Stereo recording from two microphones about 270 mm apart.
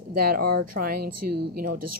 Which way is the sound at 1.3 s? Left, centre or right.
Right.